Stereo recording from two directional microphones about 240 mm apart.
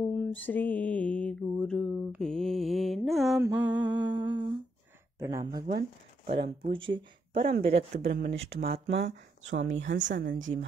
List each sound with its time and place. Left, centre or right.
0.2 s mantra: centre
3.4 s a sound: centre
5.2 s speech: centre
5.8 s a woman's voice: right